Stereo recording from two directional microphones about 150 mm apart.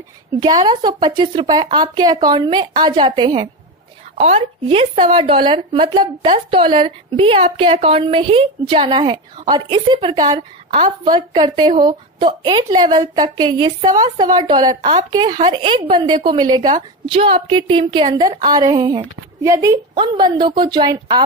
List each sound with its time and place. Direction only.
0.4 s a woman's voice: 25° right (ahead or behind)
4.1 s a sound: 45° right (ahead or behind)
4.4 s a woman's voice: 35° right (ahead or behind)